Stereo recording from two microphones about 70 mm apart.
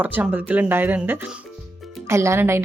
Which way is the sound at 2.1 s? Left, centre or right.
Right.